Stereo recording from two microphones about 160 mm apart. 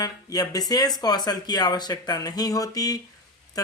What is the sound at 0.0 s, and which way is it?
Speech, 25° left (ahead or behind).